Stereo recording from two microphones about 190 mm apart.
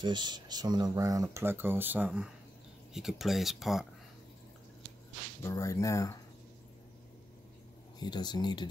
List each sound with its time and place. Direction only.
0.0 s speech: 25° right (ahead or behind); by 3.8 s centre (ahead or behind)
5.4 s speech: 15° left (ahead or behind)
8.0 s speech: 20° left (ahead or behind)